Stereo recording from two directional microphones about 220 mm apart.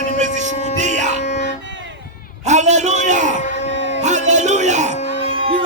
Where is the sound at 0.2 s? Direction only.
35° right (ahead or behind).